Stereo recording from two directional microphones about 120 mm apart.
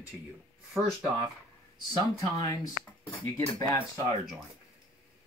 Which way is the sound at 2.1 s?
30° left (ahead or behind).